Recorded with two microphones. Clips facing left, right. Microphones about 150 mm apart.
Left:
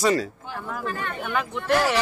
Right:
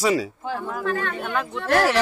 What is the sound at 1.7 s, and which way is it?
Speech, 90° right.